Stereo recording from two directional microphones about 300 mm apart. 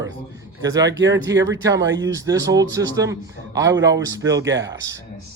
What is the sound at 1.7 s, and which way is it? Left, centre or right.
Speech, right.